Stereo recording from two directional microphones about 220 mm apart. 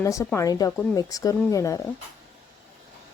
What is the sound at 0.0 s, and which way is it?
Speech, 15° left (ahead or behind).